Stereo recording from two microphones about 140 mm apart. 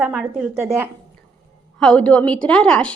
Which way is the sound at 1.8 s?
5° left (ahead or behind).